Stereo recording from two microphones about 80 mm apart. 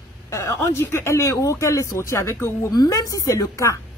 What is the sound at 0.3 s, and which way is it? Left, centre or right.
Speech, left.